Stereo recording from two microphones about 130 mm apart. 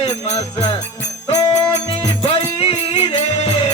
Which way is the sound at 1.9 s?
50° left (ahead or behind).